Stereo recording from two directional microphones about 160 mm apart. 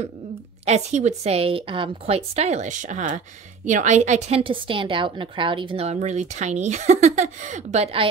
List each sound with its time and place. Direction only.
0.7 s a woman's voice: 45° right (ahead or behind)